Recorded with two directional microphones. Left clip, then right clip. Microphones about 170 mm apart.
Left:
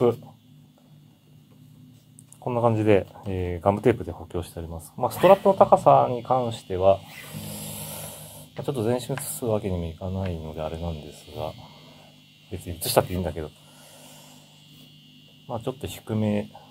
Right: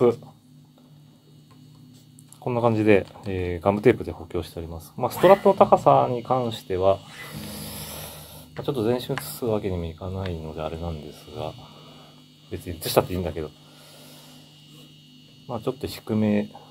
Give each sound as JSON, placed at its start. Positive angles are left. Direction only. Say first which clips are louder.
{"t": 2.4, "sound": "speech", "louder": "right 1 dB", "side_deg": 10}
{"t": 15.4, "sound": "speech", "louder": "right 2 dB", "side_deg": 10}